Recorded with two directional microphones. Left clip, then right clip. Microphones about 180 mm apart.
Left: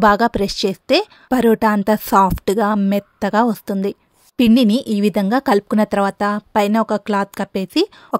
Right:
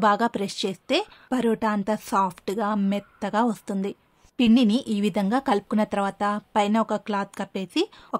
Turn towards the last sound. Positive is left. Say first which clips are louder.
# left 8 dB
turn(degrees=35)  # may be behind; listen again after turning